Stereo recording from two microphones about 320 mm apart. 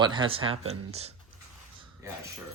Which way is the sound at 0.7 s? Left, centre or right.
Centre.